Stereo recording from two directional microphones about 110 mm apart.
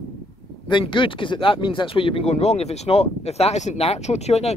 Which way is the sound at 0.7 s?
50° left (ahead or behind).